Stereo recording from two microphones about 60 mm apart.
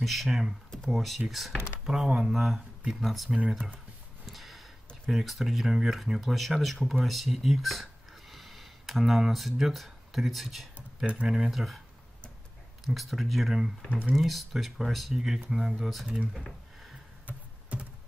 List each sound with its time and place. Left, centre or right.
0.0 s speech: centre
4.3 s a sound: centre
5.1 s speech: centre
12.8 s speech: centre
17.3 s computer keyboard: right